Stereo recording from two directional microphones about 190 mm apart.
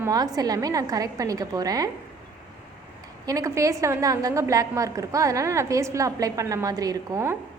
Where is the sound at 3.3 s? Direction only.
15° right (ahead or behind).